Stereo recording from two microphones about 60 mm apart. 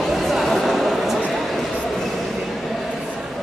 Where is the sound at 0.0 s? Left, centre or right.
Centre.